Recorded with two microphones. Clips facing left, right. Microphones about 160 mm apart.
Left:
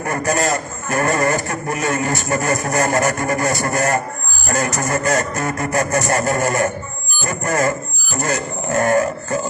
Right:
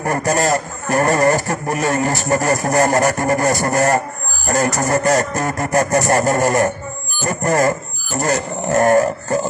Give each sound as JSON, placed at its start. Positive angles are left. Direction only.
{"t": 0.0, "sound": "a man's voice", "side_deg": -40}